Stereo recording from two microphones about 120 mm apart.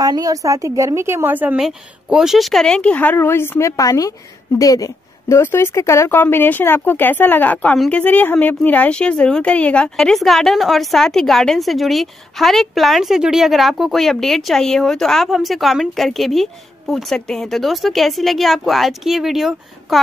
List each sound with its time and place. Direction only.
0.0 s a woman's voice: 30° right (ahead or behind); by 1.6 s 15° right (ahead or behind)
1.6 s a woman's voice: 5° right (ahead or behind)